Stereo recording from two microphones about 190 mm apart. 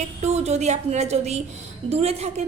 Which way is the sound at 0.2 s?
35° right (ahead or behind).